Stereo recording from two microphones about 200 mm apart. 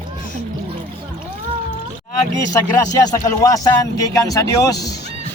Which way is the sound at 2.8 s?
15° left (ahead or behind).